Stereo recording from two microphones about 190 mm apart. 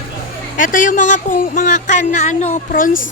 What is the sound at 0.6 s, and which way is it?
Speech, 45° left (ahead or behind).